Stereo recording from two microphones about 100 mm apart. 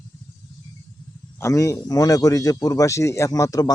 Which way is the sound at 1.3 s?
30° left (ahead or behind).